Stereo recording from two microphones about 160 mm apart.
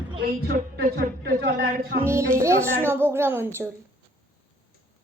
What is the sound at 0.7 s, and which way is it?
A man's voice, 70° right (ahead or behind).